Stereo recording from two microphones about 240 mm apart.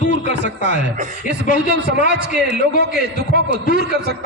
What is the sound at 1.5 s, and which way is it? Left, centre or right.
A man's voice, right.